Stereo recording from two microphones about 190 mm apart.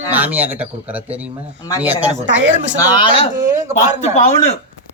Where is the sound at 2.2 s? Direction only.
75° right (ahead or behind).